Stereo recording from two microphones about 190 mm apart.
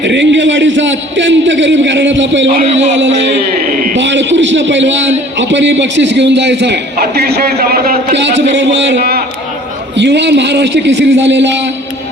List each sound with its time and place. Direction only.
0.0 s a man's voice: 70° right (ahead or behind)
2.5 s a man's voice: 35° right (ahead or behind)
3.9 s a man's voice: 70° right (ahead or behind)
5.4 s a sound: 70° right (ahead or behind); by 9.2 s 55° right (ahead or behind)
10.0 s a man's voice: 65° right (ahead or behind)